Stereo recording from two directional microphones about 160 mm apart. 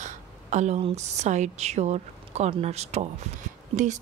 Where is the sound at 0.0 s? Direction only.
45° right (ahead or behind).